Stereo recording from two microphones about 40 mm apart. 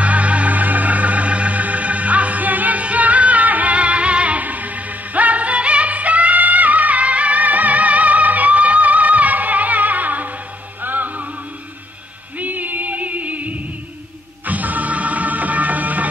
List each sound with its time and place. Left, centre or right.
0.0 s music: right
12.4 s music: right